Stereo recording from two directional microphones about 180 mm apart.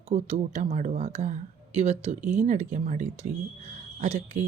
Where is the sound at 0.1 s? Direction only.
40° right (ahead or behind).